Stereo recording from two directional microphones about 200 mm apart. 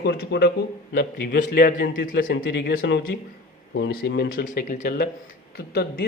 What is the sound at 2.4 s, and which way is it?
Speech, 60° left (ahead or behind).